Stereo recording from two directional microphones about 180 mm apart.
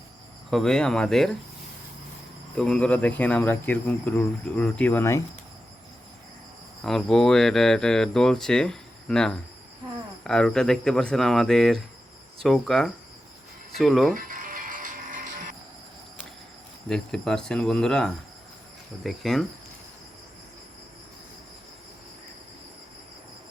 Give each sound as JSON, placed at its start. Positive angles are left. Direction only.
{"t": 0.5, "sound": "speech", "side_deg": 5}
{"t": 2.6, "sound": "speech", "side_deg": 5}
{"t": 6.8, "sound": "speech", "side_deg": 0}
{"t": 14.1, "sound": "music", "side_deg": -50}
{"t": 16.9, "sound": "speech", "side_deg": 5}